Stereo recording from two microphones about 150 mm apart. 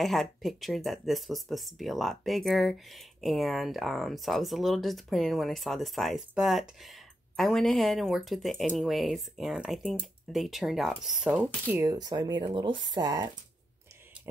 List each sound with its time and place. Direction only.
0.0 s speech: centre (ahead or behind)
11.7 s speech: 20° right (ahead or behind)